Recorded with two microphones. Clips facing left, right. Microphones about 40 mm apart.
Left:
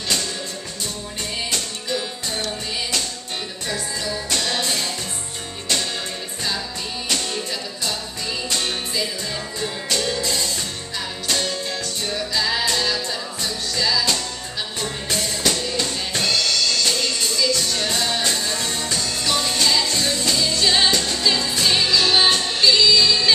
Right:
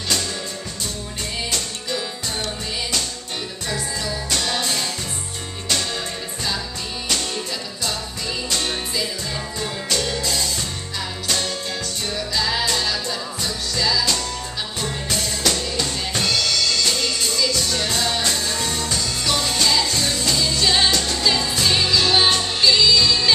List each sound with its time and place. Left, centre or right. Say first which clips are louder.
1.5 s music: left 1 dB; centre
3.6 s music: even; centre
7.1 s music: even; centre